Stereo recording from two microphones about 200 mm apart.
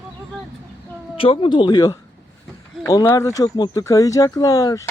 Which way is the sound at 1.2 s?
25° left (ahead or behind).